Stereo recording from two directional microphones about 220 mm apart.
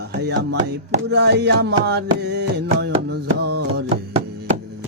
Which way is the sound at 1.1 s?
50° right (ahead or behind).